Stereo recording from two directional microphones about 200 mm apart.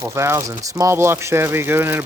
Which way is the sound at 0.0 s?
15° right (ahead or behind).